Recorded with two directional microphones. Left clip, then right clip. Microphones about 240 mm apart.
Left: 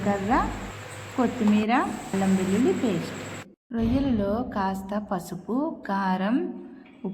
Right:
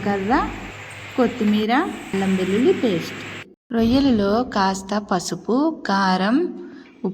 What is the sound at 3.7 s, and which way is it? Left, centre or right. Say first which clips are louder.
A woman's voice: right 8 dB; centre.